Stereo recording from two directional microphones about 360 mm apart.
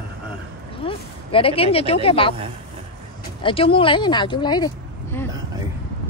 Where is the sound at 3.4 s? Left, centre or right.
Centre.